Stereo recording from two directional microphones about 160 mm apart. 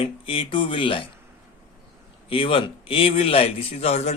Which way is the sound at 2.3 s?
35° left (ahead or behind).